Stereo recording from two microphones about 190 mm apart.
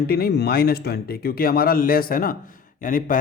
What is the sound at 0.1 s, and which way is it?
Speech, 55° left (ahead or behind).